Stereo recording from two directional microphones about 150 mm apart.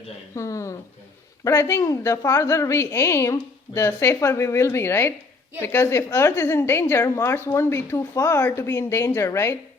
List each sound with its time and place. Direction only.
0.3 s a woman's voice: 20° left (ahead or behind)